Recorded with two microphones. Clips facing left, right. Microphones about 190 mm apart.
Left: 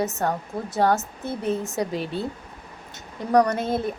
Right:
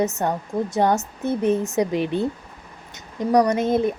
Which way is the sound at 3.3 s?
15° right (ahead or behind).